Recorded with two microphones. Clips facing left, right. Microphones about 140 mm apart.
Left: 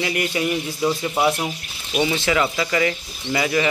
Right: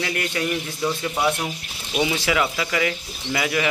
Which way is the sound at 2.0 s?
5° right (ahead or behind).